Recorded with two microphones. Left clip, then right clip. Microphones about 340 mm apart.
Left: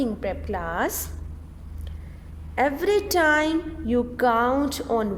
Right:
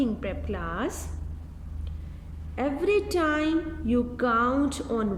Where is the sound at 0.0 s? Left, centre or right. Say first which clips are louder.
Left 3 dB; centre.